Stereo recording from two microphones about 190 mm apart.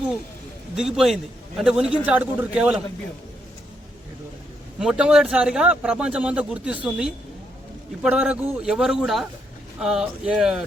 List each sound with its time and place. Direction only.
0.8 s speech: 5° right (ahead or behind)
4.8 s speech: 5° right (ahead or behind)